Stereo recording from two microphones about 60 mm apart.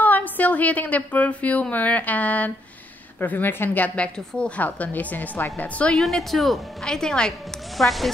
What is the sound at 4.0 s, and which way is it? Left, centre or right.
A woman's voice, centre.